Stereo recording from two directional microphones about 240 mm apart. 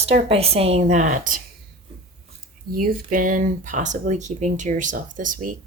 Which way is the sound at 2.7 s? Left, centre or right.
Right.